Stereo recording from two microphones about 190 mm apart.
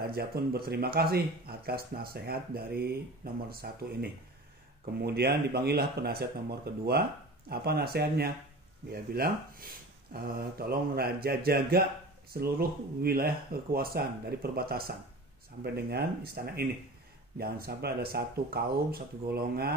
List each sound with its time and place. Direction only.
0.0 s speech: 55° right (ahead or behind)